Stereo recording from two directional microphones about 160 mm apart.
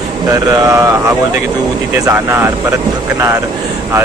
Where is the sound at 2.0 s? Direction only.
15° right (ahead or behind).